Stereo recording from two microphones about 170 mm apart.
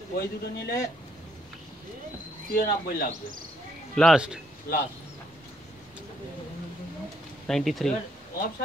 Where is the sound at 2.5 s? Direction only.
65° left (ahead or behind).